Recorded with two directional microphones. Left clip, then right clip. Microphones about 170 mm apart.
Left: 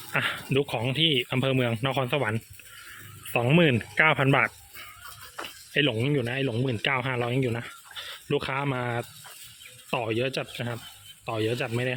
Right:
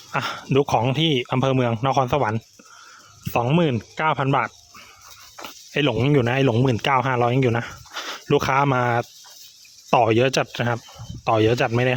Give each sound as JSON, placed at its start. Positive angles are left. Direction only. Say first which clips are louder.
{"t": 0.1, "sound": "speech", "louder": "right 4 dB", "side_deg": -30}
{"t": 5.7, "sound": "speech", "louder": "right 5 dB", "side_deg": -40}
{"t": 6.9, "sound": "speech", "louder": "right 8 dB", "side_deg": -35}